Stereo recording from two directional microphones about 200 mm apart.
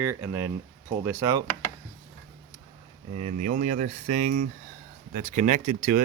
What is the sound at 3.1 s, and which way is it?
Speech, 35° right (ahead or behind).